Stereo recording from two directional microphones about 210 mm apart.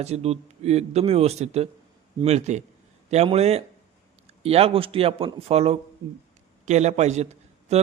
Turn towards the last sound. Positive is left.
turn(degrees=-30)  # may be behind; listen again after turning